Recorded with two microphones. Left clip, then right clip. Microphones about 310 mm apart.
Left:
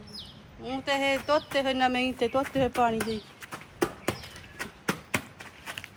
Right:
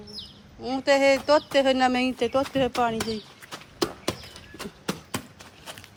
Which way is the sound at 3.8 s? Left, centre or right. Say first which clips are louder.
Right 1 dB; centre.